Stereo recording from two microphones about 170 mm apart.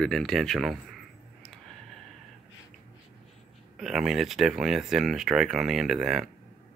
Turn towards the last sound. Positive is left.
turn(degrees=-5)  # may be behind; listen again after turning